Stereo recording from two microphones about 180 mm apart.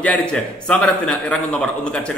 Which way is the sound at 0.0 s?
5° left (ahead or behind).